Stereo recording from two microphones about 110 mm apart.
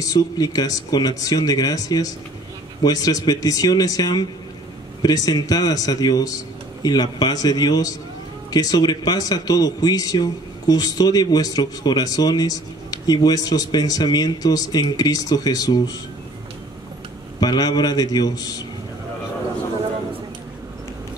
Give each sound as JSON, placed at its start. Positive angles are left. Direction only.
{"t": 0.0, "sound": "speech", "side_deg": 35}
{"t": 17.4, "sound": "speech", "side_deg": 35}